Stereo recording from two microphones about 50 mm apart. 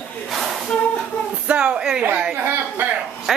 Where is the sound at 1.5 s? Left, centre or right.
Right.